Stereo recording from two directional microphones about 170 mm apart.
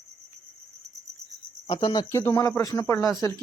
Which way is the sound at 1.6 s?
25° left (ahead or behind).